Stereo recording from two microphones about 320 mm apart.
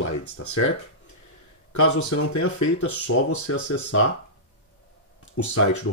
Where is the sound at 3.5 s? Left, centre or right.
Left.